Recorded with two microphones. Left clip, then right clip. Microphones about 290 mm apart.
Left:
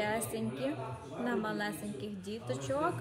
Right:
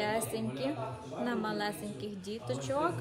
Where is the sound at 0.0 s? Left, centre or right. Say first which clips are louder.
Right 1 dB; centre.